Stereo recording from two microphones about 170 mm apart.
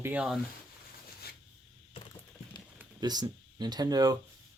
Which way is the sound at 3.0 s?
25° right (ahead or behind).